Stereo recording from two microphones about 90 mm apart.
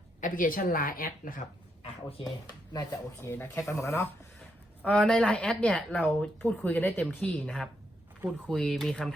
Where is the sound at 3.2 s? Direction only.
30° left (ahead or behind).